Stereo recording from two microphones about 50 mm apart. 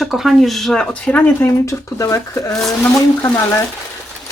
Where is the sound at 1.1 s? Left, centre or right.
Left.